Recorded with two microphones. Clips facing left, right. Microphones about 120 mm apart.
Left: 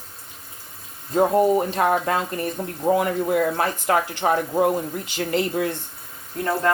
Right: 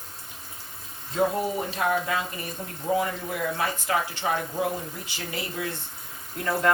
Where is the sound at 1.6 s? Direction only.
60° left (ahead or behind).